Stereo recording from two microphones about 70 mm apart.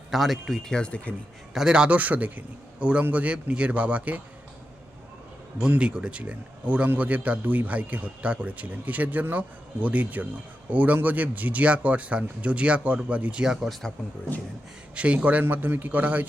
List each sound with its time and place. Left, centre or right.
0.1 s speech: centre
1.5 s a man's voice: centre
2.0 s a man's voice: right
5.5 s a man's voice: centre
14.9 s a man's voice: centre